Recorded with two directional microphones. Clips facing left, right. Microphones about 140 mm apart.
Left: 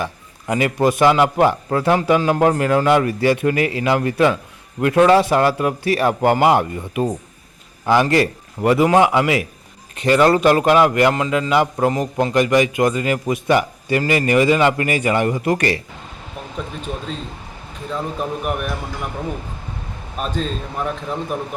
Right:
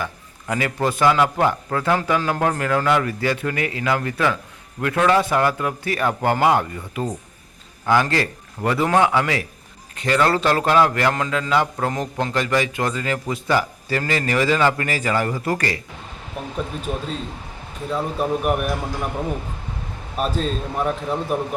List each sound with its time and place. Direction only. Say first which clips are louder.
0.0 s a man's voice: left 3 dB; 20° left (ahead or behind)
17.9 s speech: right 2 dB; 5° right (ahead or behind)
20.1 s speech: right 1 dB; 5° right (ahead or behind)